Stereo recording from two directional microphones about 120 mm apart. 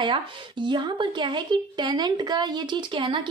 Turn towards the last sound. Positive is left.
turn(degrees=-40)  # may be behind; listen again after turning